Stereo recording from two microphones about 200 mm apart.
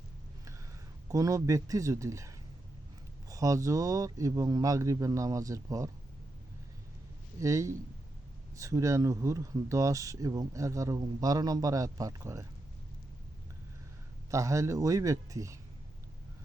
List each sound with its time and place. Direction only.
1.1 s speech: 15° right (ahead or behind)
7.3 s speech: 15° right (ahead or behind)
14.3 s speech: 15° right (ahead or behind)